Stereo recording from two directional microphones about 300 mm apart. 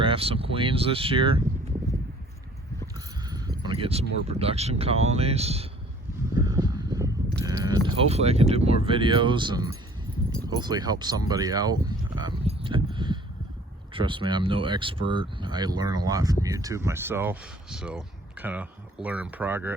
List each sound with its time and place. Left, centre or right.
0.0 s speech: centre
2.8 s a sound: centre
4.3 s speech: centre
6.3 s vehicle: centre
7.4 s speech: centre